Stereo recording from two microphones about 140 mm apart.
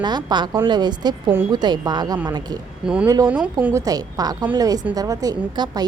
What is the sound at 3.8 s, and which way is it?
A woman's voice, 25° right (ahead or behind).